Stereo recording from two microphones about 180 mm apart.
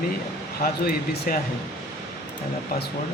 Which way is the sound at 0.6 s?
55° left (ahead or behind).